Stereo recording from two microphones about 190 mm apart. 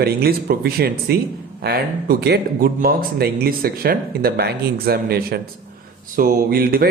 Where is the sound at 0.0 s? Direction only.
55° right (ahead or behind).